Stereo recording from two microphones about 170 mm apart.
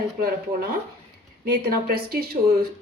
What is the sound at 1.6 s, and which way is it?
A woman's voice, 60° right (ahead or behind).